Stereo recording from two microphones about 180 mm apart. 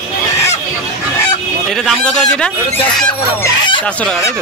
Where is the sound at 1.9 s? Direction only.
5° left (ahead or behind).